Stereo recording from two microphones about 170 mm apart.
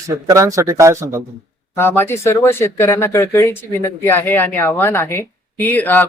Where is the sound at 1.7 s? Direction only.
15° left (ahead or behind).